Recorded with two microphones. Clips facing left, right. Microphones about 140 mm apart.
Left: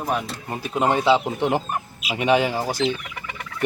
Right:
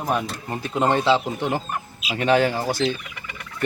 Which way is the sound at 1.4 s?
25° left (ahead or behind).